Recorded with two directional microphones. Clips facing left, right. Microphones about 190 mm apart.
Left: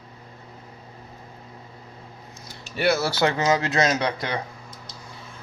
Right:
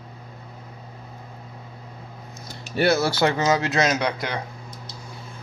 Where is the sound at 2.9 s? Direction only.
15° right (ahead or behind).